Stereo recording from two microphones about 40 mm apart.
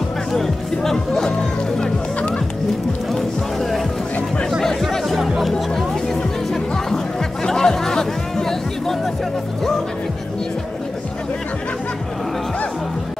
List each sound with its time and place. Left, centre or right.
0.3 s music: centre
5.0 s music: centre